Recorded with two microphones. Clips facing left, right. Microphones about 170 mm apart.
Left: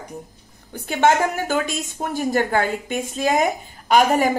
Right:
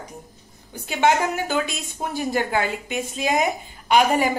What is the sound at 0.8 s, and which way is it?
A woman's voice, 50° left (ahead or behind).